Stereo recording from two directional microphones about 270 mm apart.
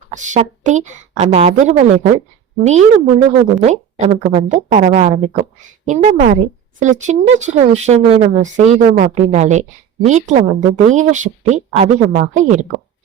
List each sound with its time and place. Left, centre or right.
0.1 s a woman's voice: right